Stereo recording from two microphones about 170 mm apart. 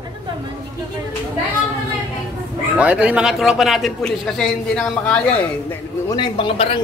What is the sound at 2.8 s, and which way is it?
A man's voice, 5° right (ahead or behind).